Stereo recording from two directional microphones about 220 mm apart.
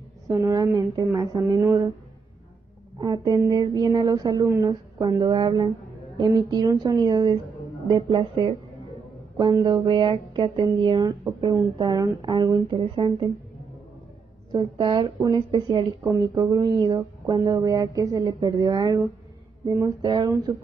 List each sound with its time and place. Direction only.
0.3 s speech: 15° right (ahead or behind)
3.0 s speech: 20° right (ahead or behind)
14.5 s speech: 20° right (ahead or behind)